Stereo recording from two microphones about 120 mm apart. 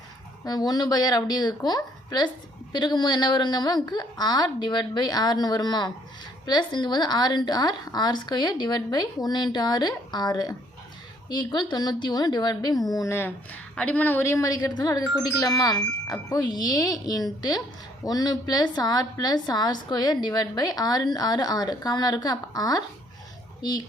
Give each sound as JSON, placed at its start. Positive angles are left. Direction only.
{"t": 0.4, "sound": "a woman's voice", "side_deg": 35}